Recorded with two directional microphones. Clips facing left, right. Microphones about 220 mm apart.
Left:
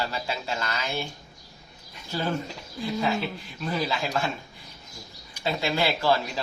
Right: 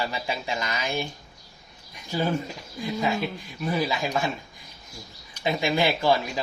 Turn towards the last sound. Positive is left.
turn(degrees=-15)  # may be behind; listen again after turning